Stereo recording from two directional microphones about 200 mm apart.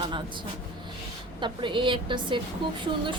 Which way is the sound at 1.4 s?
25° right (ahead or behind).